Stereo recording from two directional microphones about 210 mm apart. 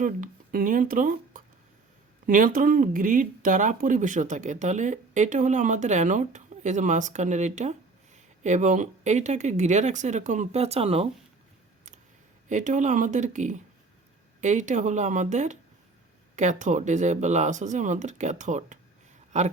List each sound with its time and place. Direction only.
0.0 s speech: 40° right (ahead or behind)
12.5 s speech: 35° right (ahead or behind)